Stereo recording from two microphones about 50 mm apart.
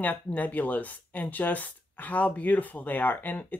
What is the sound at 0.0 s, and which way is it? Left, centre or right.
Speech, left.